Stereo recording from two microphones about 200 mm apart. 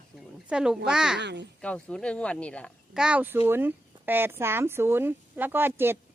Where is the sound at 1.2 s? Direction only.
60° right (ahead or behind).